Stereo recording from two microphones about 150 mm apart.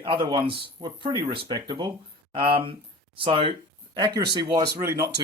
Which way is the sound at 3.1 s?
35° right (ahead or behind).